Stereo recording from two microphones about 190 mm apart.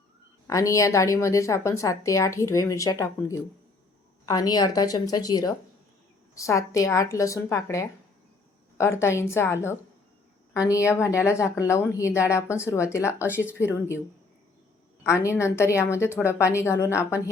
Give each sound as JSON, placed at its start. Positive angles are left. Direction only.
{"t": 0.4, "sound": "a woman's voice", "side_deg": 15}
{"t": 15.0, "sound": "a woman's voice", "side_deg": 15}